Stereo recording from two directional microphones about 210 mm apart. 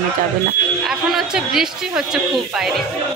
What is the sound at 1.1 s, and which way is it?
Speech, centre (ahead or behind).